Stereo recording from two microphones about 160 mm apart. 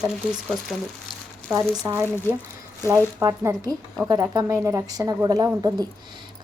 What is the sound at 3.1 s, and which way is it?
A woman's voice, 15° right (ahead or behind).